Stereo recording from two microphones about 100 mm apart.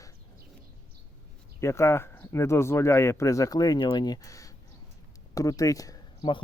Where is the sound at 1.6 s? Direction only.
30° left (ahead or behind).